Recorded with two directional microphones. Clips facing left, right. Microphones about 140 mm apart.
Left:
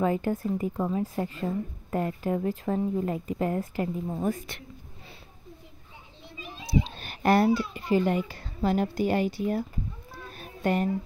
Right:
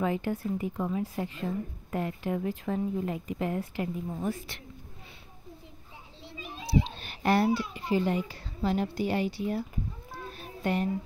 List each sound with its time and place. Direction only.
0.0 s speech: 45° left (ahead or behind)
7.0 s a child's voice: 50° left (ahead or behind)
10.3 s a sound: 50° left (ahead or behind)